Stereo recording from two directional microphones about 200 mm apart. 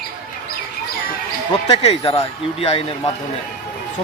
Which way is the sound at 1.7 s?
30° left (ahead or behind).